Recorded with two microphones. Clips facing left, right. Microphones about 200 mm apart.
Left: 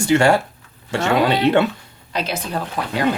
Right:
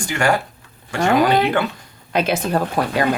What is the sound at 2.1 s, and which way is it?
Speech, 55° right (ahead or behind).